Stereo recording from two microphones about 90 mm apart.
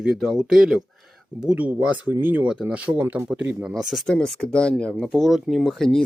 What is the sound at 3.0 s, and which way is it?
Speech, 25° right (ahead or behind).